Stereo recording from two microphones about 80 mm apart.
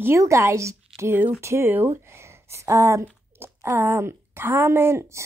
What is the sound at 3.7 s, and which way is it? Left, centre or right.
Speech, right.